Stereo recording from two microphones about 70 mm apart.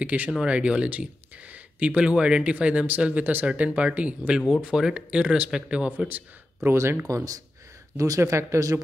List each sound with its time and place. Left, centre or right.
0.0 s speech: right
5.9 s speech: right
6.7 s speech: right
7.1 s speech: right
8.2 s speech: right